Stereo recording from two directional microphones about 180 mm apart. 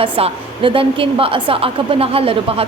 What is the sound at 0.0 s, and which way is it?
A woman's voice, 30° right (ahead or behind).